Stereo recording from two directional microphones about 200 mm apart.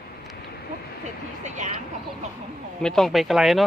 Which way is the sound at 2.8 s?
Centre (ahead or behind).